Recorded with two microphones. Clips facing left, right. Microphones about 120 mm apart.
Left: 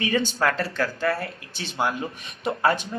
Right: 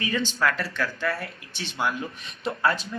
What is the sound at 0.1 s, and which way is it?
Speech, 40° left (ahead or behind).